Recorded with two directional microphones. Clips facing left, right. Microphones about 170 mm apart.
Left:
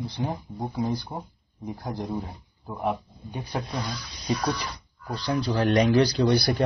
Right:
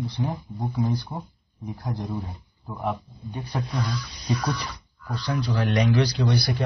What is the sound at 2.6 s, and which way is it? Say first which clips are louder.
Speech: left 1 dB; 15° left (ahead or behind).